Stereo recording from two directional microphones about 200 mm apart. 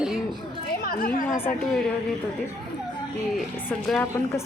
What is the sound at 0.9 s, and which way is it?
Speech, 45° left (ahead or behind).